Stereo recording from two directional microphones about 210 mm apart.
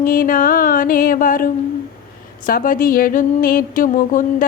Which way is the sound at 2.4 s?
40° left (ahead or behind).